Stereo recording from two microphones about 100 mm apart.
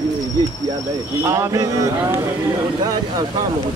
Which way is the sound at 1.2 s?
35° right (ahead or behind).